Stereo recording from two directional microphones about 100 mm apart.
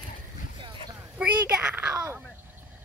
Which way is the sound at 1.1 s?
10° right (ahead or behind).